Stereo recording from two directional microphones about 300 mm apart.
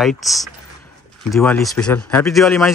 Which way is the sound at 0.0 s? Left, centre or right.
Centre.